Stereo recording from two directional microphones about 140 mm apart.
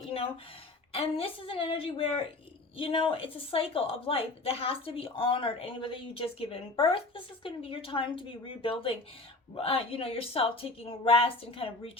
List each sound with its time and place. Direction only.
0.9 s a woman's voice: 45° left (ahead or behind)